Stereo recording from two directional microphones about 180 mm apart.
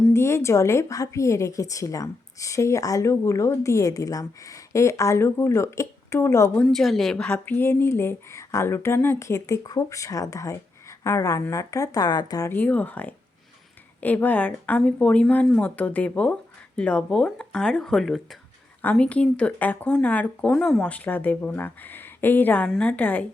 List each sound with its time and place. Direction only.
0.1 s speech: 15° left (ahead or behind)
6.7 s speech: centre (ahead or behind)